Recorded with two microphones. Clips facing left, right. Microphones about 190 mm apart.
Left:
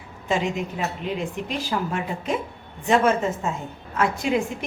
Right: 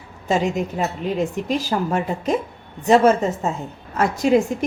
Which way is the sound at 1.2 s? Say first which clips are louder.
Right 6 dB; 40° right (ahead or behind).